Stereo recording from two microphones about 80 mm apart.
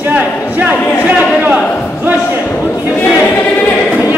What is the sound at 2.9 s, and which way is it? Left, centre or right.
Choir, left.